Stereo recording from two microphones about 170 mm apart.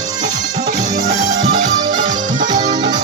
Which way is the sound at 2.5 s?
45° right (ahead or behind).